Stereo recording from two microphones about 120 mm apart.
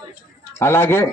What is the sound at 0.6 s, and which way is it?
Speech, 20° left (ahead or behind).